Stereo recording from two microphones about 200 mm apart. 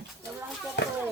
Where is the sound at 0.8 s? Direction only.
60° left (ahead or behind).